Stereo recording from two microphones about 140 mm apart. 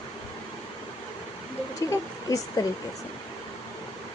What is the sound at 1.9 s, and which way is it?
Speech, 25° left (ahead or behind).